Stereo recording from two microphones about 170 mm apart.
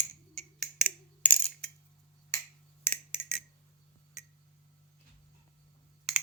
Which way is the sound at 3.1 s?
35° left (ahead or behind).